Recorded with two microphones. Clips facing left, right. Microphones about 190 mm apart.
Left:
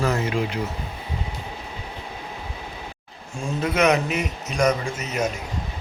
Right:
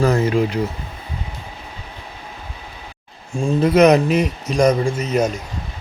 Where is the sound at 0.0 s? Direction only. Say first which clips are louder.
Right 7 dB; 40° right (ahead or behind).